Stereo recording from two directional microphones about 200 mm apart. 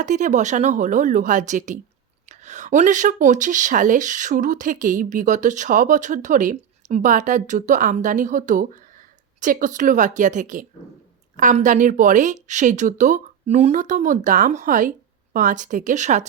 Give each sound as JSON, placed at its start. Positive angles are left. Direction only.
{"t": 0.0, "sound": "speech", "side_deg": -40}